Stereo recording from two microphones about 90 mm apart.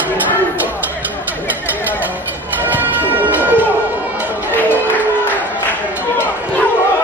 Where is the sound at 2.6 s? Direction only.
20° right (ahead or behind).